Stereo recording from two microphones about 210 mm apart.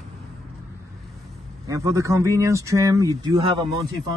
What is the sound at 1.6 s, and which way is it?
Speech, 15° right (ahead or behind).